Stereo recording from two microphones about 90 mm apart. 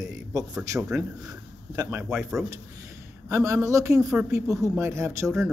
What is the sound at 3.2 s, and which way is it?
Speech, 35° right (ahead or behind).